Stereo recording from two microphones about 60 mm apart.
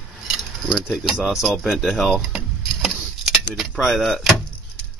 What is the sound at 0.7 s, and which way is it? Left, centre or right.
Speech, centre.